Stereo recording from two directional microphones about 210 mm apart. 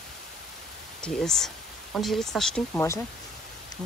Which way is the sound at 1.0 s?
5° left (ahead or behind).